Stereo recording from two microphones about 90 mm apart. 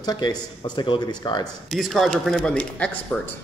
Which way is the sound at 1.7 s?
Centre (ahead or behind).